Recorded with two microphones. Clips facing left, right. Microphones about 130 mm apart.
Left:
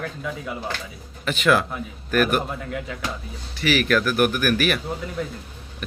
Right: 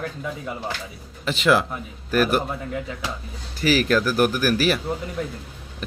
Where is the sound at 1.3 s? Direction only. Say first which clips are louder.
Even; 25° right (ahead or behind).